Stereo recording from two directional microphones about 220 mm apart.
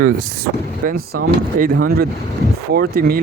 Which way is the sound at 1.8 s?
45° right (ahead or behind).